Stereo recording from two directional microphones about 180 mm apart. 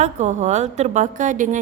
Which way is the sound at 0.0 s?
40° right (ahead or behind).